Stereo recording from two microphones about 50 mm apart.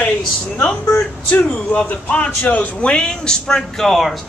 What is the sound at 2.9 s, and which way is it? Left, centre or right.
A man's voice, centre.